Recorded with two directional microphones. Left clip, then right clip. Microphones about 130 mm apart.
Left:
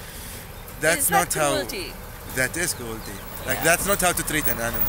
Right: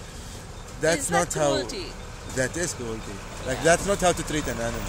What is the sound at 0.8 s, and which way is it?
Speech, 35° right (ahead or behind).